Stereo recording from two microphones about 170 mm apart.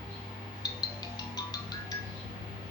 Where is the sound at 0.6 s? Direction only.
25° left (ahead or behind).